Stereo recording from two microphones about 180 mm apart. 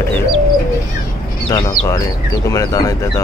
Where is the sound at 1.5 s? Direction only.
25° left (ahead or behind).